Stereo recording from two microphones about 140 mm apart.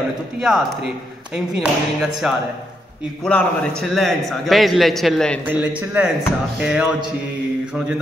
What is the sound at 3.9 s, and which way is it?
A man's voice, centre (ahead or behind).